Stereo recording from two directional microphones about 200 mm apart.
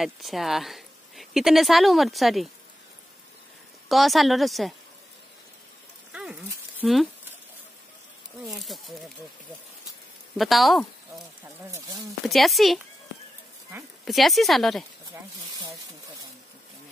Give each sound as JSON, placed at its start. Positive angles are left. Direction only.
{"t": 0.0, "sound": "speech", "side_deg": 0}
{"t": 3.9, "sound": "speech", "side_deg": 0}
{"t": 6.8, "sound": "speech", "side_deg": 0}
{"t": 8.4, "sound": "speech", "side_deg": 0}
{"t": 10.3, "sound": "speech", "side_deg": 0}
{"t": 11.7, "sound": "speech", "side_deg": -15}
{"t": 12.3, "sound": "speech", "side_deg": 0}
{"t": 14.0, "sound": "speech", "side_deg": 0}